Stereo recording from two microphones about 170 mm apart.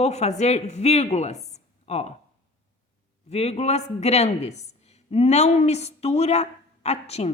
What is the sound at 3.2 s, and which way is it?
A woman's voice, 40° left (ahead or behind).